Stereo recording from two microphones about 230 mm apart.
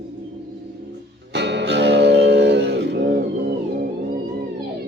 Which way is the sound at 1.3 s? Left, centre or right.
Right.